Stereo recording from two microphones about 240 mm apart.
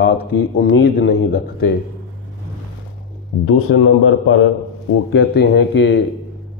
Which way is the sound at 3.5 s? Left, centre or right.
Left.